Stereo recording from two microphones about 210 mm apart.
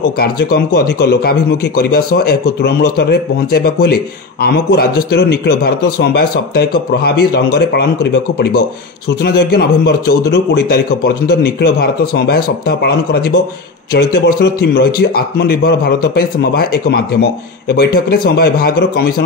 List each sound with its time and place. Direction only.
0.2 s speech: 45° left (ahead or behind)